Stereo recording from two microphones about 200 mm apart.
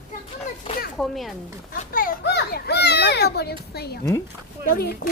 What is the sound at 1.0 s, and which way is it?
Speech, centre (ahead or behind).